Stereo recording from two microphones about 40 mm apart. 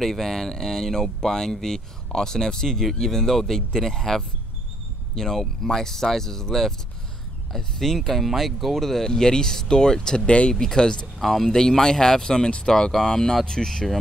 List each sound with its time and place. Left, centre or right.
0.0 s speech: centre
10.2 s speech: left
10.5 s speech: centre
11.1 s speech: centre
11.5 s speech: centre